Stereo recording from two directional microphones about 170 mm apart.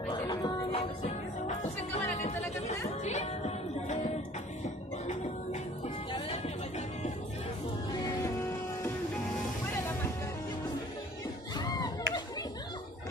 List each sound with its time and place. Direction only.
0.1 s music: 30° left (ahead or behind)
8.0 s music: 15° left (ahead or behind)
11.5 s a sound: 25° left (ahead or behind)